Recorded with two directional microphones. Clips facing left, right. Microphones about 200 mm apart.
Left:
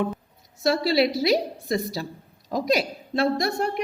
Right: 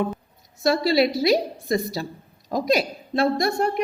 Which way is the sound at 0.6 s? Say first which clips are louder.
Right 2 dB; 45° right (ahead or behind).